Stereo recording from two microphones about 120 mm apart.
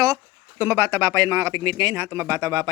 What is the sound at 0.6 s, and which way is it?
Speech, 20° right (ahead or behind).